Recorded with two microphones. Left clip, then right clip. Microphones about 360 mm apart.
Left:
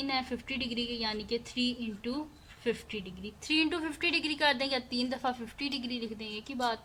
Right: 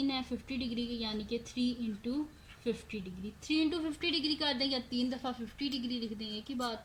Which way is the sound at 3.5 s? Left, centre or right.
Left.